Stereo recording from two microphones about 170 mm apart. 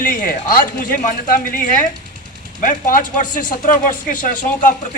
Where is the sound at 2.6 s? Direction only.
55° left (ahead or behind).